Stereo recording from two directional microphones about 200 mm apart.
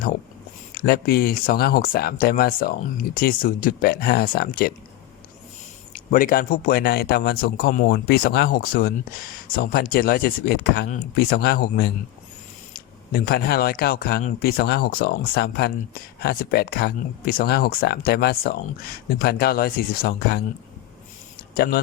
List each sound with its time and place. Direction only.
0.7 s speech: 50° left (ahead or behind)
5.9 s speech: 40° left (ahead or behind)
21.5 s speech: 50° left (ahead or behind)